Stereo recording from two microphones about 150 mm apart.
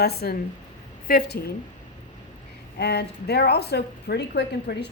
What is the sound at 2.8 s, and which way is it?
A woman's voice, 90° left.